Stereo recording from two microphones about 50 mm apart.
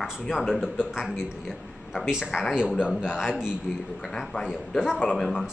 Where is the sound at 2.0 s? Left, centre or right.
Centre.